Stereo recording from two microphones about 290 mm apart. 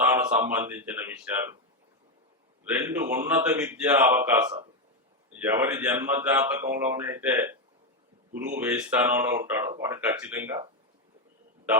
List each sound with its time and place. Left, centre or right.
0.0 s speech: centre
2.6 s speech: centre